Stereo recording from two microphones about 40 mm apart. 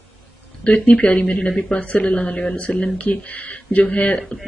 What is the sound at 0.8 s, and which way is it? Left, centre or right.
Speech, left.